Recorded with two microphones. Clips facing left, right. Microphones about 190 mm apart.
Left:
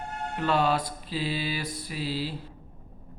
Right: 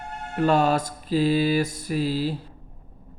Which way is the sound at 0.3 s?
45° right (ahead or behind).